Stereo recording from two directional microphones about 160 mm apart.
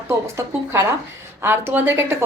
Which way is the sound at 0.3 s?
15° right (ahead or behind).